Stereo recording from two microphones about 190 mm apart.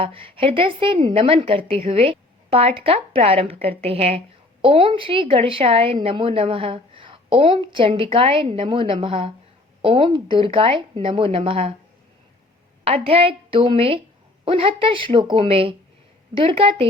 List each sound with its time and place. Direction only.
0.0 s a woman's voice: 30° right (ahead or behind)
12.8 s a woman's voice: 30° right (ahead or behind)